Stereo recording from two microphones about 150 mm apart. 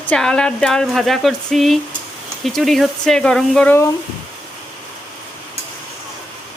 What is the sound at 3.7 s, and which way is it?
Speech, 20° left (ahead or behind).